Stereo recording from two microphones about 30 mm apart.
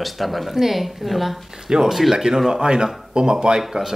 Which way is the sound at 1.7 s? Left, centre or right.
Right.